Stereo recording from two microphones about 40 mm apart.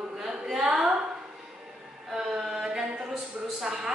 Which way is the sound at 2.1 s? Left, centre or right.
Centre.